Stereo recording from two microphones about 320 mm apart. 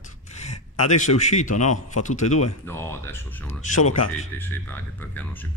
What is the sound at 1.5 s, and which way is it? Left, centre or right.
A man's voice, left.